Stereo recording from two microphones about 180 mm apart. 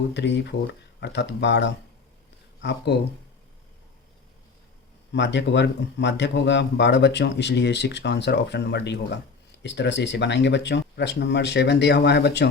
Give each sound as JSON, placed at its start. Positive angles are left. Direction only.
{"t": 0.1, "sound": "speech", "side_deg": 75}
{"t": 5.1, "sound": "speech", "side_deg": 75}